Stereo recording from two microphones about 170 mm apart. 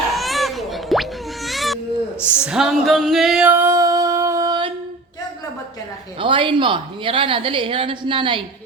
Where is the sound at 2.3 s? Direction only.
5° right (ahead or behind); by 4.7 s 25° right (ahead or behind).